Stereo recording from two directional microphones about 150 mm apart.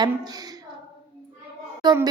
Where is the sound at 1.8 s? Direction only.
30° right (ahead or behind).